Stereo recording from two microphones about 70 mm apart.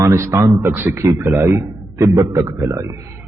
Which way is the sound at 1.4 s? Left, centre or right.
Right.